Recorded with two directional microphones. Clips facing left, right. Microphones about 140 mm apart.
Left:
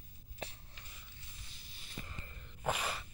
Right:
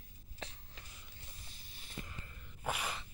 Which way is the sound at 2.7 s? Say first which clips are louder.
Left 3 dB; 10° right (ahead or behind).